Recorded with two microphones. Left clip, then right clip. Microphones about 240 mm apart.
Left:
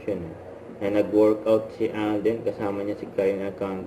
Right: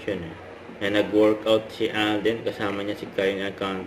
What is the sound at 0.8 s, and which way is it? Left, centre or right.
Speech, centre.